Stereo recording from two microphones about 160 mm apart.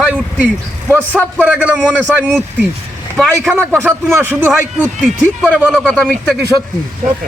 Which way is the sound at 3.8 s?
15° right (ahead or behind).